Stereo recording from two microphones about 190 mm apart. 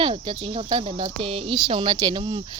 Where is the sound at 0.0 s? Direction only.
25° right (ahead or behind).